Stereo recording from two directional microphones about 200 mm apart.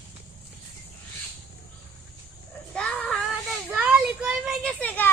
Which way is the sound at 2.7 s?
5° left (ahead or behind).